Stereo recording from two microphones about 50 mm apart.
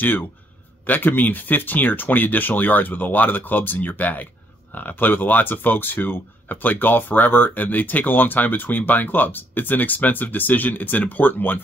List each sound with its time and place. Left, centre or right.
0.8 s speech: left